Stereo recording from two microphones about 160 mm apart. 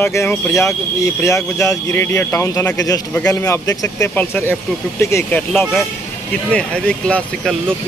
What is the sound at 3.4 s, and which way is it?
Speech, 20° left (ahead or behind).